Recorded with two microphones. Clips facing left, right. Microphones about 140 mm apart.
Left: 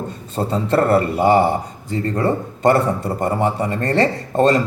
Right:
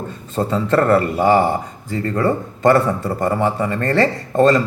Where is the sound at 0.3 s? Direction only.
30° left (ahead or behind).